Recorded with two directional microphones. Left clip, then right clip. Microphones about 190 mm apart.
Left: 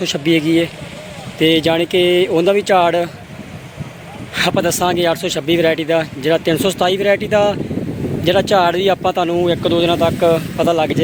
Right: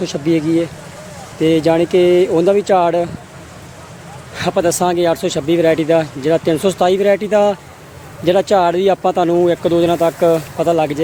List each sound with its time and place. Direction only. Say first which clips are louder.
0.0 s speech: left 1 dB; centre (ahead or behind)
4.4 s speech: even; 5° right (ahead or behind)